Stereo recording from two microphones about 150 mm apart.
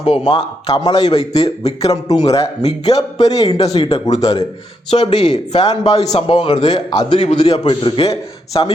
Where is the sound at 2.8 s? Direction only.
25° left (ahead or behind).